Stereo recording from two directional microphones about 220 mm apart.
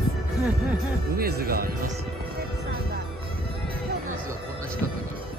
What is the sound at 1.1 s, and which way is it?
Speech, 45° right (ahead or behind).